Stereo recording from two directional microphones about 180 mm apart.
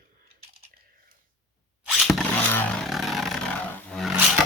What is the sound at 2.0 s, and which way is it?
Vehicle, centre (ahead or behind).